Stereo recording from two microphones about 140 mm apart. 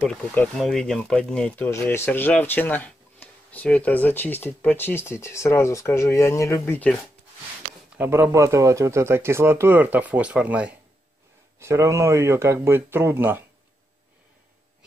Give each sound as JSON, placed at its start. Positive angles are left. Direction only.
{"t": 0.0, "sound": "speech", "side_deg": 10}
{"t": 1.7, "sound": "speech", "side_deg": 15}
{"t": 8.0, "sound": "speech", "side_deg": -15}
{"t": 11.6, "sound": "speech", "side_deg": -20}